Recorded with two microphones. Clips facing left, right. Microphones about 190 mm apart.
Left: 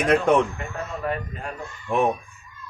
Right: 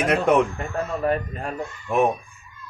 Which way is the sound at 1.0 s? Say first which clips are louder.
Right 4 dB; 40° right (ahead or behind).